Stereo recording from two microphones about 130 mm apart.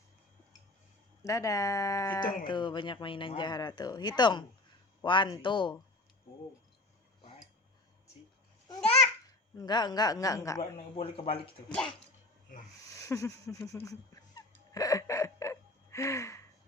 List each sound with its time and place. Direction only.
1.2 s speech: 25° left (ahead or behind)
2.4 s speech: 35° left (ahead or behind)
9.6 s speech: 30° left (ahead or behind)
10.9 s speech: 50° left (ahead or behind)
13.0 s a sound: 25° left (ahead or behind)
13.7 s music: 25° left (ahead or behind)